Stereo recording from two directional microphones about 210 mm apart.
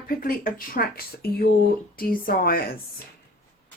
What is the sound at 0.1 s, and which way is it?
Speech, 40° left (ahead or behind).